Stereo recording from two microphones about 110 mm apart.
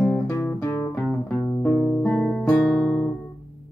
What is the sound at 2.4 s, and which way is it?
Music, 5° left (ahead or behind).